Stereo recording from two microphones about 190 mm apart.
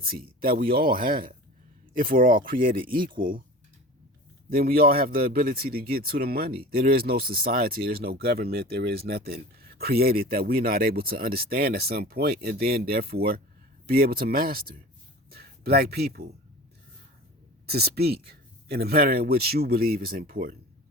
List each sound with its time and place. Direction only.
0.0 s speech: 50° right (ahead or behind)
4.4 s speech: 50° right (ahead or behind)
17.7 s speech: 55° right (ahead or behind)